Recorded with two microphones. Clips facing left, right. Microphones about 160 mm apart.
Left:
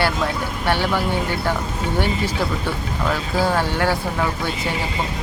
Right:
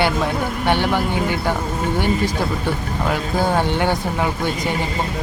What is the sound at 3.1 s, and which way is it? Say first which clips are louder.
Speech: right 1 dB; 20° right (ahead or behind).